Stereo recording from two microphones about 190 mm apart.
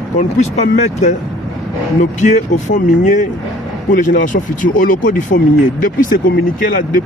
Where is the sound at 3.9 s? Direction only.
45° left (ahead or behind).